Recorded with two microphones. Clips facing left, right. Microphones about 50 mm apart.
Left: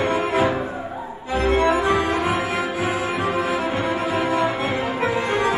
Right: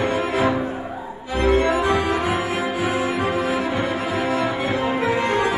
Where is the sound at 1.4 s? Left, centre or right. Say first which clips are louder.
Even; left.